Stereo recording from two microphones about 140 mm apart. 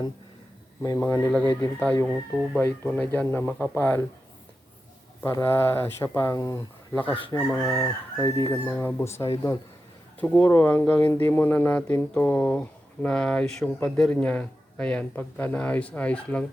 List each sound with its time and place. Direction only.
0.8 s chicken: 20° left (ahead or behind)
1.3 s speech: 10° left (ahead or behind)
2.0 s speech: 10° right (ahead or behind)
2.6 s speech: 15° left (ahead or behind)
5.2 s chicken: 20° left (ahead or behind)
10.2 s speech: 10° left (ahead or behind)